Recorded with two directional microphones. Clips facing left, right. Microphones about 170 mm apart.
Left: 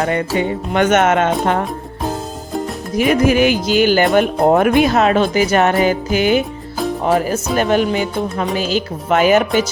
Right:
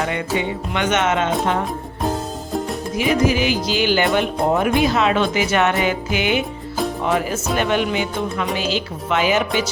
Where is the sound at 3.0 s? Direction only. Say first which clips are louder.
Left 5 dB; 55° left (ahead or behind).